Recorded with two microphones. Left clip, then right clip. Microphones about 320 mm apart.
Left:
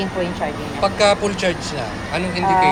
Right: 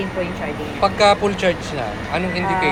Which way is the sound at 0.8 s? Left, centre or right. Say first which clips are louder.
Right 1 dB; centre.